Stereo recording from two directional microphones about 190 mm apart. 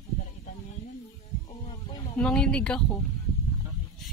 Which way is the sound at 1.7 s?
25° left (ahead or behind).